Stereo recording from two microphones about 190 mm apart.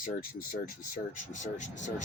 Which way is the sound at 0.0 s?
45° left (ahead or behind).